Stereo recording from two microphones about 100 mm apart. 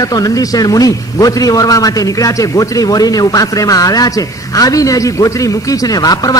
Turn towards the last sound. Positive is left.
turn(degrees=40)  # may be behind; listen again after turning